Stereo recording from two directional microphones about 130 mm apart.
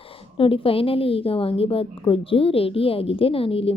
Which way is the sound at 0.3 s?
45° left (ahead or behind).